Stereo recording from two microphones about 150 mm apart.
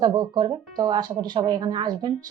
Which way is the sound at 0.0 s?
30° right (ahead or behind).